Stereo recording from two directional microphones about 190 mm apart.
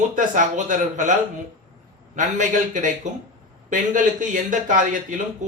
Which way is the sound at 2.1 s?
40° right (ahead or behind).